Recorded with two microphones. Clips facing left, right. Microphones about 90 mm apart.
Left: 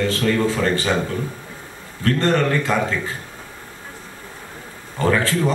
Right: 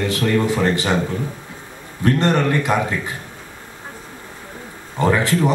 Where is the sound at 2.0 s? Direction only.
20° right (ahead or behind).